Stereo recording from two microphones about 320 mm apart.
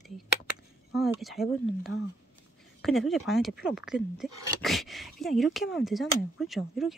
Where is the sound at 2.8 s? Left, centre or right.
Centre.